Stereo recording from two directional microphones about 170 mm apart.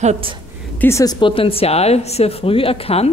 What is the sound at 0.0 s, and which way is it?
Speech, 40° right (ahead or behind).